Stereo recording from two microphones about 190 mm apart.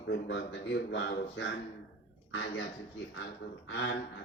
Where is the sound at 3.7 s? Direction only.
65° left (ahead or behind).